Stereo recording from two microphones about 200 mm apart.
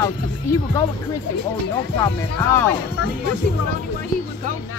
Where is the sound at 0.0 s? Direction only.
15° left (ahead or behind).